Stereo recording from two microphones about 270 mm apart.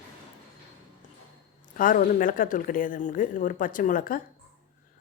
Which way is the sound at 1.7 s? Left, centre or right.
Left.